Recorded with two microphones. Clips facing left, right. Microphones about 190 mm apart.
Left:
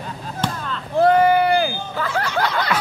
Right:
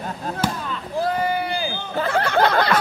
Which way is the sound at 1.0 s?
60° left (ahead or behind).